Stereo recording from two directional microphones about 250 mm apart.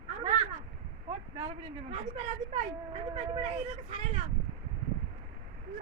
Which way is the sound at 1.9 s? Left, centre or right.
Right.